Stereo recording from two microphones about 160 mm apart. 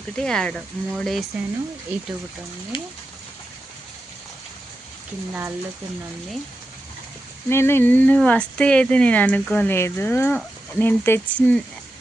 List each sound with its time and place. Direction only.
0.2 s speech: 5° left (ahead or behind)
1.9 s speech: 10° right (ahead or behind)
2.7 s speech: 30° left (ahead or behind)
5.3 s speech: 15° right (ahead or behind)
7.5 s speech: 15° left (ahead or behind)